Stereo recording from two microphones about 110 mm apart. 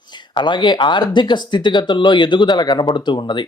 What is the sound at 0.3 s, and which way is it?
Speech, 45° left (ahead or behind).